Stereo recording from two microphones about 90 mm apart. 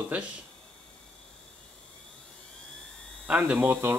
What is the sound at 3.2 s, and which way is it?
Speech, 15° right (ahead or behind).